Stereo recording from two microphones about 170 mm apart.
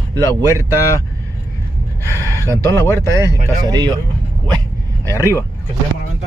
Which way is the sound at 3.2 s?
20° right (ahead or behind).